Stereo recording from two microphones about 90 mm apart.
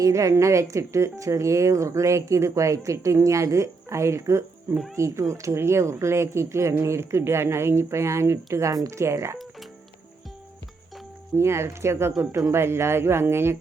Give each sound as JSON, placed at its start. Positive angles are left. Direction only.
{"t": 0.0, "sound": "a woman's voice", "side_deg": -35}
{"t": 11.3, "sound": "a woman's voice", "side_deg": -30}